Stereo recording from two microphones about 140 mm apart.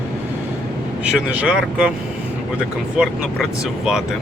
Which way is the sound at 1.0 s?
10° right (ahead or behind).